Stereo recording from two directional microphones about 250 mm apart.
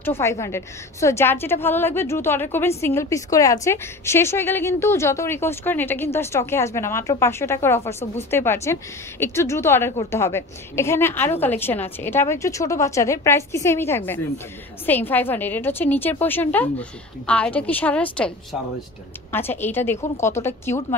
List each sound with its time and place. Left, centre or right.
0.0 s a woman's voice: centre